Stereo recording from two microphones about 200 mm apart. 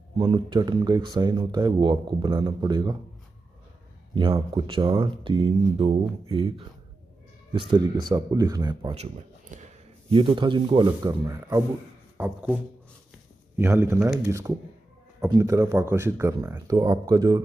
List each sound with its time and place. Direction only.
0.2 s speech: 25° right (ahead or behind)
4.1 s speech: 25° right (ahead or behind)
8.9 s a sound: 35° right (ahead or behind)
10.1 s speech: 25° right (ahead or behind)
13.6 s speech: 10° right (ahead or behind)